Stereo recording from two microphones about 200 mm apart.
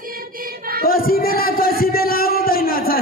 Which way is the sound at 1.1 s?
45° left (ahead or behind).